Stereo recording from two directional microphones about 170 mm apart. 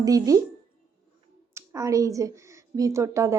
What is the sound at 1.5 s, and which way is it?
A woman's voice, 20° right (ahead or behind).